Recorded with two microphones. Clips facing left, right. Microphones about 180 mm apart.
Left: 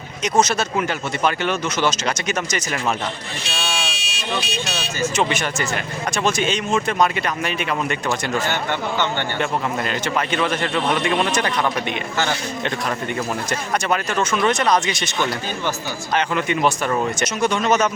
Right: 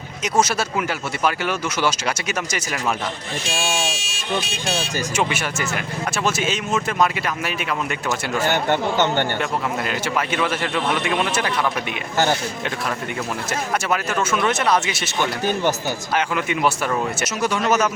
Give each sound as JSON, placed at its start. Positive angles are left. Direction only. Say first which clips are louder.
{"t": 0.3, "sound": "speech", "louder": "left 1 dB", "side_deg": -5}
{"t": 3.4, "sound": "speech", "louder": "right 3 dB", "side_deg": -45}
{"t": 5.1, "sound": "a man's voice", "louder": "left 1 dB", "side_deg": -10}
{"t": 8.7, "sound": "speech", "louder": "right 3 dB", "side_deg": -45}
{"t": 9.4, "sound": "a man's voice", "louder": "left 1 dB", "side_deg": -5}
{"t": 12.1, "sound": "speech", "louder": "right 5 dB", "side_deg": -45}
{"t": 13.5, "sound": "a man's voice", "louder": "right 1 dB", "side_deg": -5}